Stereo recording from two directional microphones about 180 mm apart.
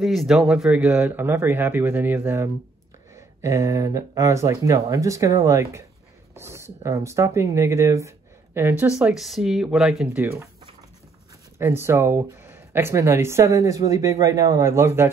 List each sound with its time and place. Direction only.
0.0 s speech: centre (ahead or behind)
11.5 s speech: 15° right (ahead or behind)